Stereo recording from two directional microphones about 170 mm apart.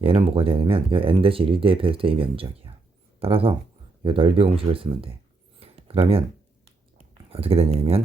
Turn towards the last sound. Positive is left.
turn(degrees=-35)  # may be behind; listen again after turning